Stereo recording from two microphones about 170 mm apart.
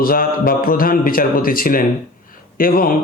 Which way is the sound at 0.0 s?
60° left (ahead or behind).